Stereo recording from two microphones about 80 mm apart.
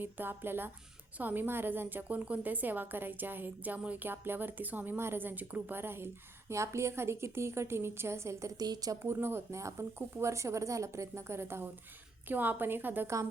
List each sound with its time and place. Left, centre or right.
0.0 s a woman's voice: right
8.5 s a woman's voice: right
9.0 s a woman's voice: right